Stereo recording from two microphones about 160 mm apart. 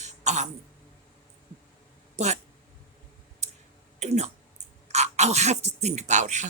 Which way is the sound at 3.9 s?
45° right (ahead or behind).